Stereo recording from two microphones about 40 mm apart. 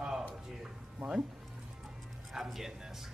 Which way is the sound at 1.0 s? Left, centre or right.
Right.